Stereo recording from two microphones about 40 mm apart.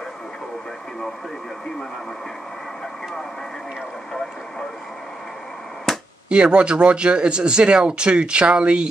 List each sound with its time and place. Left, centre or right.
5.9 s chop: centre
6.4 s speech: right